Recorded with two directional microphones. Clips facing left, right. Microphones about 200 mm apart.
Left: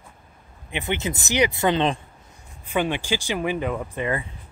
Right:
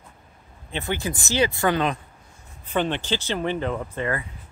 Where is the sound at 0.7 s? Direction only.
20° left (ahead or behind).